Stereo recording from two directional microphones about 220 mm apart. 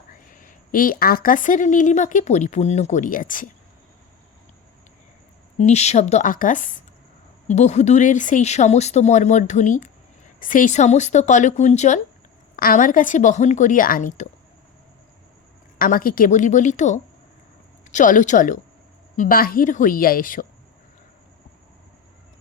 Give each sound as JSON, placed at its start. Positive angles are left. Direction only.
{"t": 0.1, "sound": "a woman's voice", "side_deg": 40}
{"t": 5.5, "sound": "a woman's voice", "side_deg": 30}
{"t": 15.8, "sound": "a woman's voice", "side_deg": 40}